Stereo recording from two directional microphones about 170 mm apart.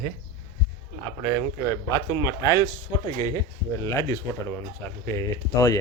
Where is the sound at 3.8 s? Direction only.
20° left (ahead or behind).